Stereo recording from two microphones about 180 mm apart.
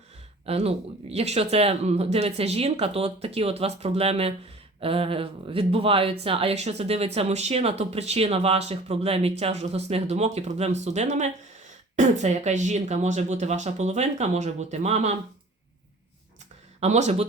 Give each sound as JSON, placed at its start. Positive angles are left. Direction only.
{"t": 0.4, "sound": "speech", "side_deg": -35}
{"t": 16.8, "sound": "speech", "side_deg": -35}